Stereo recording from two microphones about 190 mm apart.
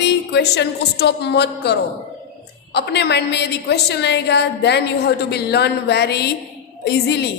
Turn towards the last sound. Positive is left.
turn(degrees=60)  # may be behind; listen again after turning